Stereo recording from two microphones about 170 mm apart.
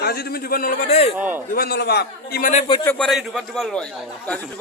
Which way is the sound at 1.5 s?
65° left (ahead or behind).